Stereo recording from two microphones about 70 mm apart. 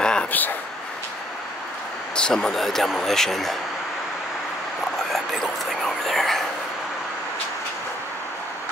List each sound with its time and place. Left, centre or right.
0.0 s a sound: centre
0.3 s speech: left
2.1 s speech: centre
5.1 s whispering: centre